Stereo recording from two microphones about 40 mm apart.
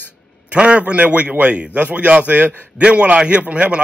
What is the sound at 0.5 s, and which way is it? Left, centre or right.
A man's voice, right.